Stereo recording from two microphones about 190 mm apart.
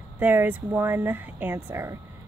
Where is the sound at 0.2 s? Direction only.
10° right (ahead or behind).